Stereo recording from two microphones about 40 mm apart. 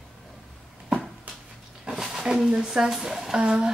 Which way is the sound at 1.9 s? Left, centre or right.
Centre.